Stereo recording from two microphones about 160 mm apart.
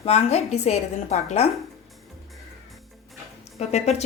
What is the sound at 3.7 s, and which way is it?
Speech, 45° left (ahead or behind).